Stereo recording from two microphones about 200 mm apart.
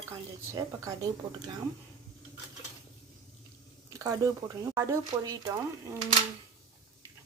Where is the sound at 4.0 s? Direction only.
15° right (ahead or behind).